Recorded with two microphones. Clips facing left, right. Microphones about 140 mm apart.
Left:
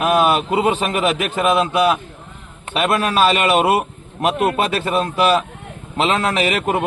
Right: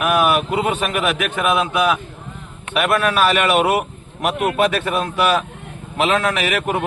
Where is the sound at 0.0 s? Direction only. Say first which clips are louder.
Left 1 dB; 25° left (ahead or behind).